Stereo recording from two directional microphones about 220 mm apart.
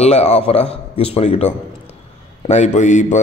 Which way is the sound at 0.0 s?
30° left (ahead or behind).